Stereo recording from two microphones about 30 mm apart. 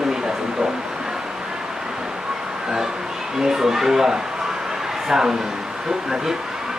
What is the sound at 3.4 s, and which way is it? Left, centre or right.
Speech, centre.